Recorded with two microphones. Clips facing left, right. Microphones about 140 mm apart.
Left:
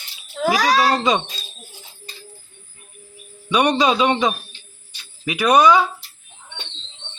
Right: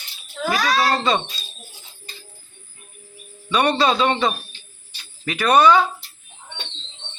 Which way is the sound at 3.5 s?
15° left (ahead or behind).